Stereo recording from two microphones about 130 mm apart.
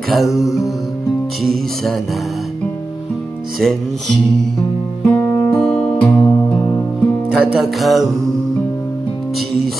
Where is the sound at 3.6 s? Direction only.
Centre (ahead or behind).